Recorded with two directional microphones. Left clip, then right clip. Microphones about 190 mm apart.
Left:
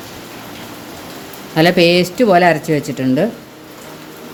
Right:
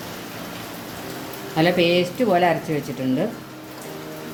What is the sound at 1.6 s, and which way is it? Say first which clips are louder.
Speech: left 7 dB; 70° left (ahead or behind).